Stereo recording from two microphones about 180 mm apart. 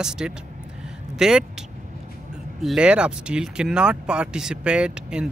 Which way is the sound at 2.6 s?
5° right (ahead or behind).